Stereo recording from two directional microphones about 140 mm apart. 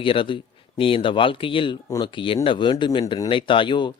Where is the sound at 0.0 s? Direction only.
40° left (ahead or behind).